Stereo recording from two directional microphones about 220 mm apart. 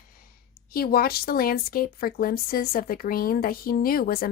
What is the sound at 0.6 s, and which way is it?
Speech, 40° left (ahead or behind).